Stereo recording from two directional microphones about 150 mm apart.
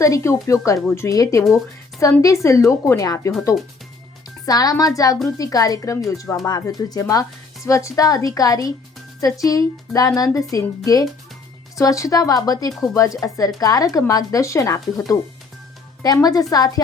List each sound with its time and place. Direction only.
0.0 s speech: 20° left (ahead or behind)
4.4 s speech: 25° left (ahead or behind)